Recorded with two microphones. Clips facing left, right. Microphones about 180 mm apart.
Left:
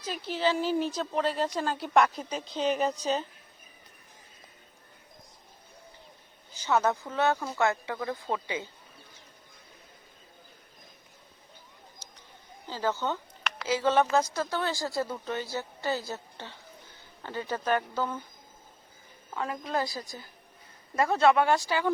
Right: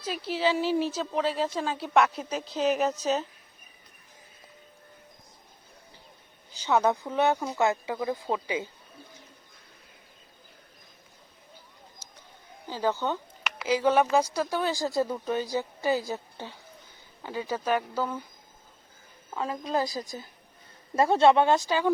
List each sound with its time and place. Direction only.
0.0 s a woman's voice: 10° right (ahead or behind)
6.7 s speech: 15° right (ahead or behind)
12.0 s a sound: 10° right (ahead or behind)
12.6 s a woman's voice: 15° right (ahead or behind)
19.3 s a woman's voice: 20° right (ahead or behind)